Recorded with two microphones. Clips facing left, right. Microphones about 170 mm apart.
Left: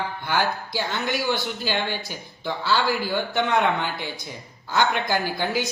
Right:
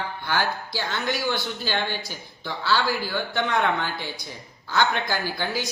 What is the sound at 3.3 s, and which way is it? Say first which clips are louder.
Speech: left 2 dB; 15° left (ahead or behind).